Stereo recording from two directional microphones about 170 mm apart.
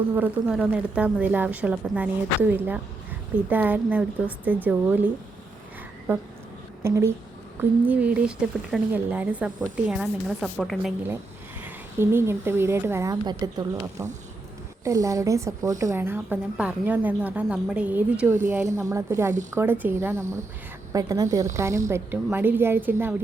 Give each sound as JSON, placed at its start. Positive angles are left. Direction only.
{"t": 0.1, "sound": "a woman's voice", "side_deg": -10}
{"t": 6.8, "sound": "a woman's voice", "side_deg": -15}
{"t": 11.6, "sound": "a woman's voice", "side_deg": -15}